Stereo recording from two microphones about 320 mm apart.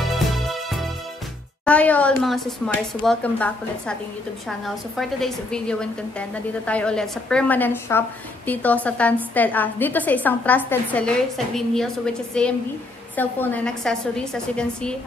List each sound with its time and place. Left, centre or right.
0.0 s music: centre
1.7 s a woman's voice: centre